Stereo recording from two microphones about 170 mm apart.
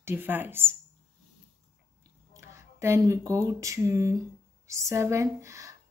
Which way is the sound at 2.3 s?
15° right (ahead or behind).